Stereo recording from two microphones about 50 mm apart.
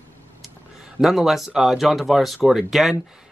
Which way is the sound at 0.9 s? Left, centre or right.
Centre.